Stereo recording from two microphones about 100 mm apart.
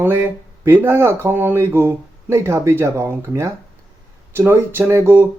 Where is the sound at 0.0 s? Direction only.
20° right (ahead or behind).